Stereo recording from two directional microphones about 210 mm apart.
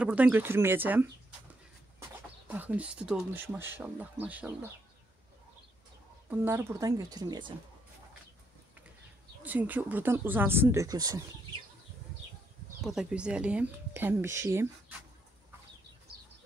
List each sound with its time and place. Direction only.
0.0 s speech: 10° right (ahead or behind)
2.4 s speech: 5° right (ahead or behind)
6.3 s speech: 10° right (ahead or behind)
9.4 s speech: 10° right (ahead or behind)
12.8 s speech: centre (ahead or behind)